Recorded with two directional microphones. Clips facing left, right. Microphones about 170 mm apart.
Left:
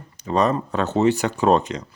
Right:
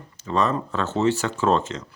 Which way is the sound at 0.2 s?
15° left (ahead or behind).